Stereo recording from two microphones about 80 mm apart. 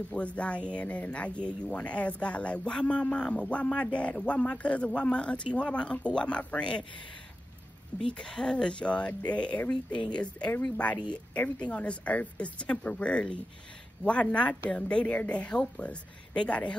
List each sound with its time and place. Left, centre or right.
0.1 s speech: centre
8.0 s speech: centre